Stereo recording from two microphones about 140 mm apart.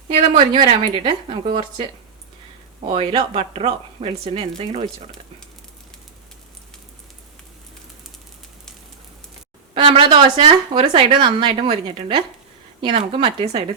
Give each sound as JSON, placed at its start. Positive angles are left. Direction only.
{"t": 0.1, "sound": "speech", "side_deg": -45}
{"t": 0.6, "sound": "speech", "side_deg": -35}
{"t": 2.8, "sound": "speech", "side_deg": -40}
{"t": 9.7, "sound": "speech", "side_deg": -35}